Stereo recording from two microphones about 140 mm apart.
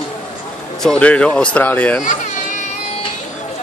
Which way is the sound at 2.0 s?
60° left (ahead or behind).